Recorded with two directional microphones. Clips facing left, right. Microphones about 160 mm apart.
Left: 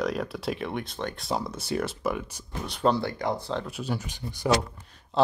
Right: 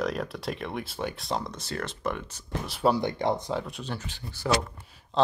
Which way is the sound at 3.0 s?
25° right (ahead or behind).